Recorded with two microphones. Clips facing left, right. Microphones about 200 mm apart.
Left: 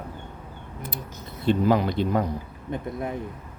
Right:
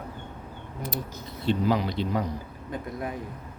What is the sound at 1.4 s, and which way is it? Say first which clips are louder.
Speech: left 4 dB; 50° left (ahead or behind).